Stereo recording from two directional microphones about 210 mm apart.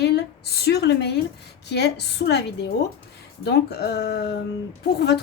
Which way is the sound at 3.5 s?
50° left (ahead or behind).